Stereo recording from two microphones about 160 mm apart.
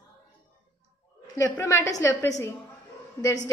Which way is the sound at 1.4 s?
20° left (ahead or behind).